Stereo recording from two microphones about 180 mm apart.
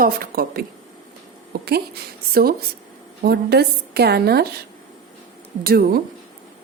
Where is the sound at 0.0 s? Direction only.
55° right (ahead or behind).